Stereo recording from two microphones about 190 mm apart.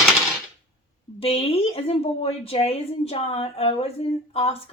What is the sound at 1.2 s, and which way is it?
A woman's voice, 30° left (ahead or behind).